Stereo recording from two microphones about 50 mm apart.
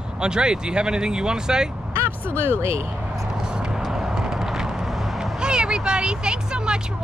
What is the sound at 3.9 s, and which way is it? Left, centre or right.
Vehicle, centre.